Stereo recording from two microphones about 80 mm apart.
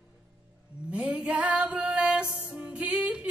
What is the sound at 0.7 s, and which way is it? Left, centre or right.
Music, centre.